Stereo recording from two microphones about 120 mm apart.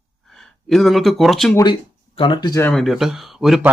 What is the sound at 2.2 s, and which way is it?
Speech, 45° left (ahead or behind).